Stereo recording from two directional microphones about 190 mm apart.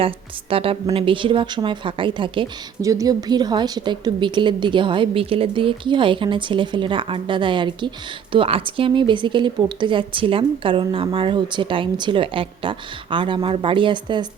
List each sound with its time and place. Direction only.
0.5 s speech: 30° right (ahead or behind)